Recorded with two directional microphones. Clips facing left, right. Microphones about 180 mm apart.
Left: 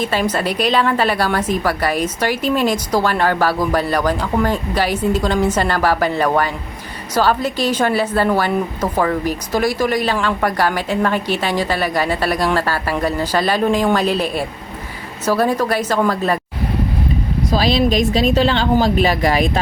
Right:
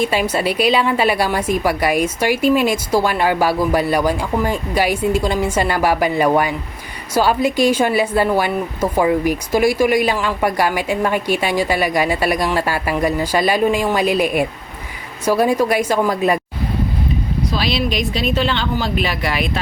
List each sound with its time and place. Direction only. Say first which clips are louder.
0.0 s a woman's voice: right 1 dB; 10° right (ahead or behind)
17.5 s a woman's voice: left 6 dB; 40° left (ahead or behind)